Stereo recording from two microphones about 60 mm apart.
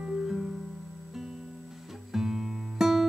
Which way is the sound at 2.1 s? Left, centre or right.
Centre.